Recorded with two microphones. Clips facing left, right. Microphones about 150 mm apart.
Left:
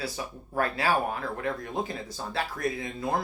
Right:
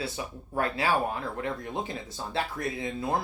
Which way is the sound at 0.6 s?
25° right (ahead or behind).